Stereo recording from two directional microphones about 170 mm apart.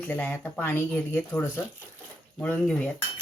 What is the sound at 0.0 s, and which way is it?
Speech, 10° left (ahead or behind).